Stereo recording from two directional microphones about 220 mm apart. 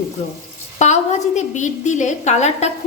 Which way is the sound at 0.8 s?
30° left (ahead or behind).